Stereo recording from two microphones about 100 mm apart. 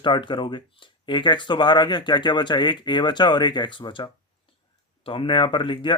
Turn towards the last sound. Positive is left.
turn(degrees=55)  # may be behind; listen again after turning